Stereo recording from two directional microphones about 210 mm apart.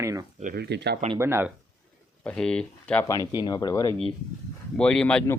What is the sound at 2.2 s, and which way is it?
Speech, 5° left (ahead or behind).